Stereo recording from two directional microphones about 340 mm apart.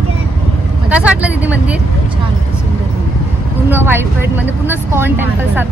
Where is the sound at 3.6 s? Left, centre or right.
Centre.